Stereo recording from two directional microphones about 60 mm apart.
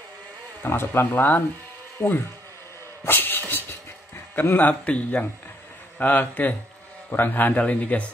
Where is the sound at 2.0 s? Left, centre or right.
Left.